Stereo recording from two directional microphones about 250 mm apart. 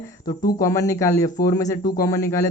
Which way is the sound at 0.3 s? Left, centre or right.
Centre.